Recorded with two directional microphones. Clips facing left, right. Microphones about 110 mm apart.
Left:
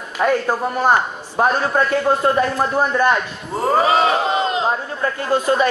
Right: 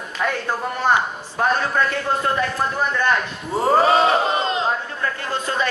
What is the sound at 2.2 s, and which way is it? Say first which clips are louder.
Speech: left 5 dB; 25° left (ahead or behind).